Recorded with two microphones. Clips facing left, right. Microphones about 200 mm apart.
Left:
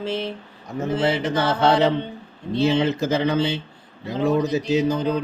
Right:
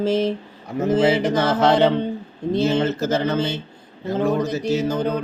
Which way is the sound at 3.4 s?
45° right (ahead or behind).